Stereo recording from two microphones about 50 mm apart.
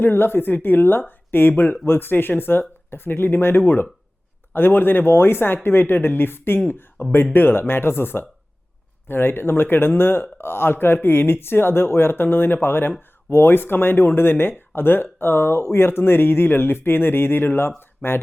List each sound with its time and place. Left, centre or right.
0.0 s speech: left